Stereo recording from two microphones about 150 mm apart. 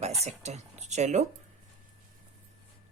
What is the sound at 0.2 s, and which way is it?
Speech, 45° right (ahead or behind).